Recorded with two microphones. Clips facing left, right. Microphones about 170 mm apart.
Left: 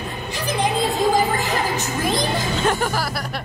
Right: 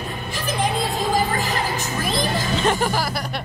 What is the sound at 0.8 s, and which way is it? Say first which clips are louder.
Music: left 3 dB; 20° left (ahead or behind).